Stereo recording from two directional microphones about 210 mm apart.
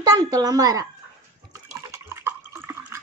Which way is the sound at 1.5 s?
15° right (ahead or behind).